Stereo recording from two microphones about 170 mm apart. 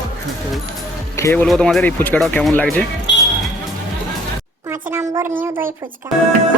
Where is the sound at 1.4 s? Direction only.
Centre (ahead or behind).